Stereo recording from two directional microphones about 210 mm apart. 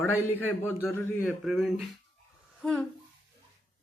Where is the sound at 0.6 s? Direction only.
10° left (ahead or behind).